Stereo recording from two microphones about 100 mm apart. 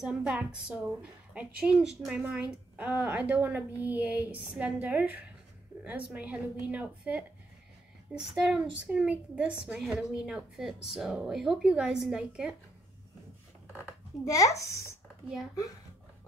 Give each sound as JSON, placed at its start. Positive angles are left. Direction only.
{"t": 0.0, "sound": "a woman's voice", "side_deg": -10}
{"t": 14.2, "sound": "speech", "side_deg": 35}